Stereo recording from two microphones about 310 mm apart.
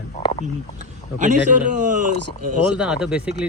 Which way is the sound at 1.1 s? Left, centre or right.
Right.